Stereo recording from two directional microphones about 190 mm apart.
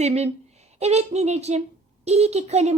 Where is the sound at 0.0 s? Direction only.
35° right (ahead or behind).